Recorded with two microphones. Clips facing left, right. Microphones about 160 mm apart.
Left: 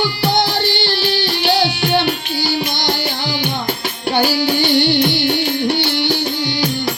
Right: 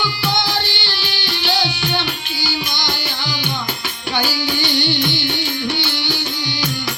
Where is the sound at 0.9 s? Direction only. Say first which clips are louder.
Left 8 dB; 35° left (ahead or behind).